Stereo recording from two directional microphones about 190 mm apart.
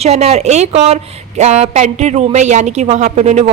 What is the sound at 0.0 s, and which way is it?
A woman's voice, 35° right (ahead or behind).